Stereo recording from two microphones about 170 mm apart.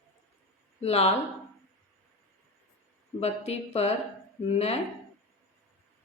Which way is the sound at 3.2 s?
40° left (ahead or behind).